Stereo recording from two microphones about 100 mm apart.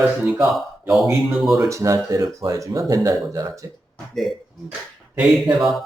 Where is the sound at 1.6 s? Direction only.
30° right (ahead or behind).